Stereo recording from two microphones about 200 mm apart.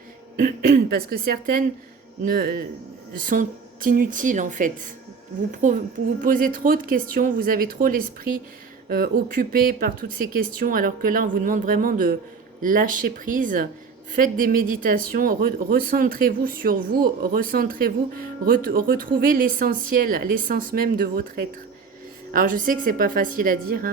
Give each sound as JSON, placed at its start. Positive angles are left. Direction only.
{"t": 0.3, "sound": "a woman's voice", "side_deg": -45}